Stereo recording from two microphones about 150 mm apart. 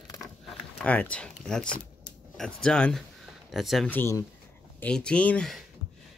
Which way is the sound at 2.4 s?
5° left (ahead or behind).